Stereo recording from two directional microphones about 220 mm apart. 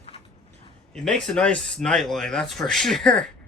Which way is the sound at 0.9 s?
Centre (ahead or behind).